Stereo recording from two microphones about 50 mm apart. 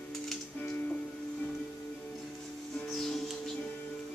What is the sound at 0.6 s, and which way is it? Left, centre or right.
Music, left.